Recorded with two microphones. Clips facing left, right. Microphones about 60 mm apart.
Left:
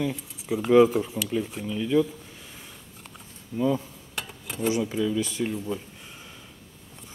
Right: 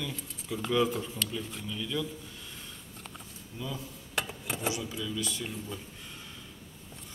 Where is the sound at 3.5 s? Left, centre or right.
Left.